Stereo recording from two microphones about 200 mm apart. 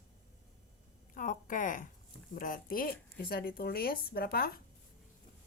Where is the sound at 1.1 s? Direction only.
40° left (ahead or behind).